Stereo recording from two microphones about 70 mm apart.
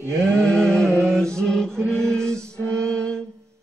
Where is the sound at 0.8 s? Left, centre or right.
Right.